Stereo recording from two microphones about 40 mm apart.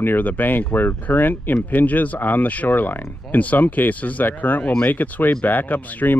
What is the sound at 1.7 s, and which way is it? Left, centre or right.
Speech, left.